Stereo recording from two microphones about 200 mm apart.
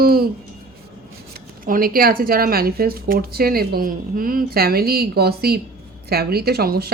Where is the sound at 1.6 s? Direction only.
45° right (ahead or behind).